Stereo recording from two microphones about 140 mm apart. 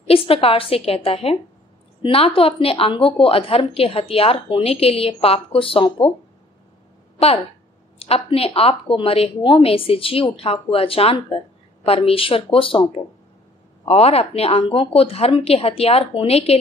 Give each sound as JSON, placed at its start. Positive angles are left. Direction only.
{"t": 0.0, "sound": "a woman's voice", "side_deg": 45}
{"t": 8.0, "sound": "speech", "side_deg": 45}